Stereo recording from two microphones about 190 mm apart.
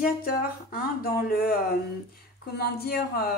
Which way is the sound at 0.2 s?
50° left (ahead or behind).